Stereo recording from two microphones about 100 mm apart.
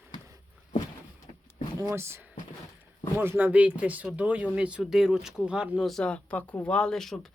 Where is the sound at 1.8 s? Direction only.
30° right (ahead or behind); by 5.8 s 10° right (ahead or behind).